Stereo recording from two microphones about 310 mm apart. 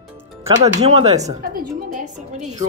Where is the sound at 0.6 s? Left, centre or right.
Right.